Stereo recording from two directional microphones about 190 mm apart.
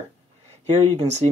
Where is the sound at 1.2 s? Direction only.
30° right (ahead or behind).